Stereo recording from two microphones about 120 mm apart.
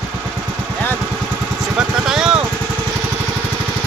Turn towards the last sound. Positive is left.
turn(degrees=-5)  # may be behind; listen again after turning